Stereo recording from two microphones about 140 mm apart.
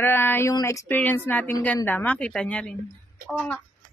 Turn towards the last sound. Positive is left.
turn(degrees=5)  # may be behind; listen again after turning